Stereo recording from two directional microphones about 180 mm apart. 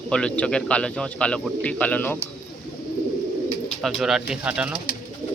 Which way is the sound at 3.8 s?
Centre (ahead or behind).